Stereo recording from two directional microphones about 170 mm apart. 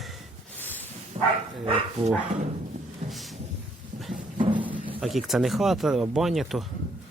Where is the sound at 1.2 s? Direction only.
40° right (ahead or behind).